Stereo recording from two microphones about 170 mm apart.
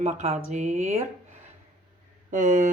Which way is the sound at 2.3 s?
45° right (ahead or behind).